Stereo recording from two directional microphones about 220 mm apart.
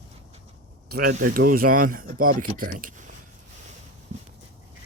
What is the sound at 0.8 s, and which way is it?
Speech, 40° right (ahead or behind).